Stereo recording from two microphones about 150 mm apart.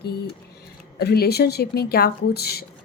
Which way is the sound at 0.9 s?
90° left.